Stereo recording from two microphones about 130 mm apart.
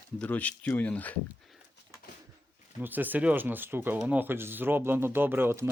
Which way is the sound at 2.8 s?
15° right (ahead or behind).